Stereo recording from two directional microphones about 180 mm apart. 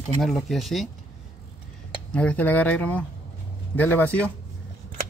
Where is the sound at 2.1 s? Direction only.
5° left (ahead or behind).